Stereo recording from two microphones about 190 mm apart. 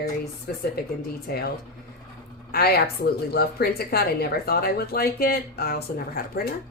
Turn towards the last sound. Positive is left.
turn(degrees=55)  # may be behind; listen again after turning